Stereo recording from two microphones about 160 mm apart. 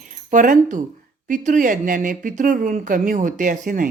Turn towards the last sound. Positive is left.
turn(degrees=-55)  # may be behind; listen again after turning